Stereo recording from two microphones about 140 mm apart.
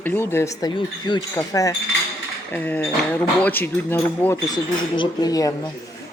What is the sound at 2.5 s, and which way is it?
Speech, 15° left (ahead or behind).